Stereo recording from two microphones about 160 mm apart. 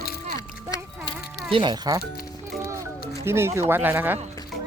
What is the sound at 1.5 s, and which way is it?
Speech, 30° right (ahead or behind).